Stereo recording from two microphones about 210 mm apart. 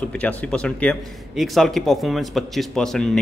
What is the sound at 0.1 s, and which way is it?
A man's voice, 5° left (ahead or behind).